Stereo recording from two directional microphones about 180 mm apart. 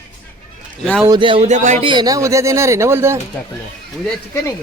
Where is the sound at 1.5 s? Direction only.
40° right (ahead or behind).